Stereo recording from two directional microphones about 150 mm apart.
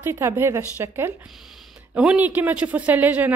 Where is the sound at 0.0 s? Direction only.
15° right (ahead or behind).